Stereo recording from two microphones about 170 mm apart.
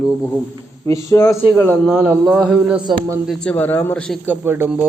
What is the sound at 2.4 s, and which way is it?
A man's voice, 5° right (ahead or behind).